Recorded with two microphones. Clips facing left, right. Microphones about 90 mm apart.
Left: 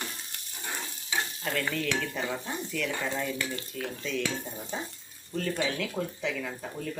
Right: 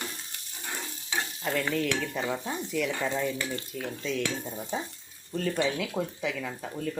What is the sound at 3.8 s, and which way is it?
Speech, 5° right (ahead or behind).